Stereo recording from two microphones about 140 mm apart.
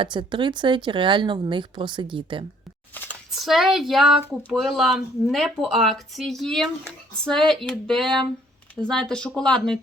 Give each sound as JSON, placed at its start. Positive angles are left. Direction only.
{"t": 0.0, "sound": "speech", "side_deg": -35}
{"t": 2.9, "sound": "a sound", "side_deg": 15}
{"t": 3.3, "sound": "speech", "side_deg": 0}